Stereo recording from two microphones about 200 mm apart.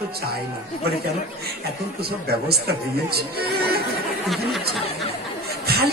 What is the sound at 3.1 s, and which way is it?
Speech, 50° right (ahead or behind).